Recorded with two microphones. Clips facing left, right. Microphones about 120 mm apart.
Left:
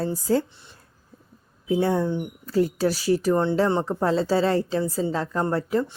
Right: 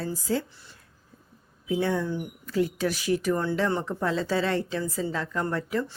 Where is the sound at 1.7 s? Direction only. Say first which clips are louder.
Left 4 dB; 30° left (ahead or behind).